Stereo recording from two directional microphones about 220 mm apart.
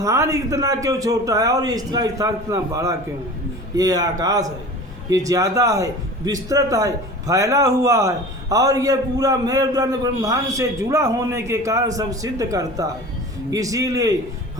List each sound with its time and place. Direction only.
0.0 s speech: 15° right (ahead or behind)